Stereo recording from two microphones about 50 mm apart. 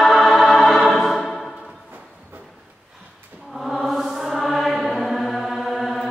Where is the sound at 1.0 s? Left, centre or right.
Centre.